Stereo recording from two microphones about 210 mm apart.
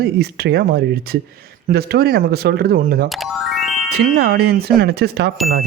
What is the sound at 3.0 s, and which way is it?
Speech, centre (ahead or behind).